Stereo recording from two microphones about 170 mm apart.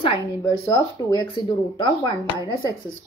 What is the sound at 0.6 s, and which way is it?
Speech, 20° left (ahead or behind).